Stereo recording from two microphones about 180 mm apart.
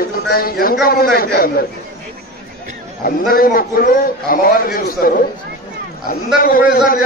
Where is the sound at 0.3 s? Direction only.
55° left (ahead or behind).